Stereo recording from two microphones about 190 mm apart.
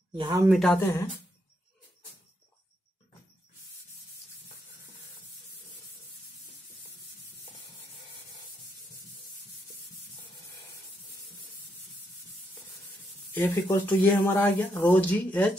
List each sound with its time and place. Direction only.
0.1 s speech: 20° right (ahead or behind)
0.5 s speech: centre (ahead or behind)
0.7 s speech: 10° left (ahead or behind)
13.3 s speech: 10° left (ahead or behind)